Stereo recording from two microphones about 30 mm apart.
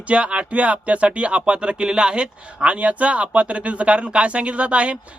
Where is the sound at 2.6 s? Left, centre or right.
Right.